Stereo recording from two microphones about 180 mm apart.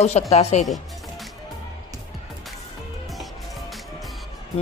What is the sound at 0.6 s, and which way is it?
Music, centre (ahead or behind).